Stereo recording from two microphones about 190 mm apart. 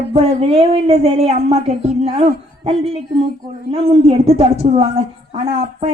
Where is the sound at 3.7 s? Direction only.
30° right (ahead or behind).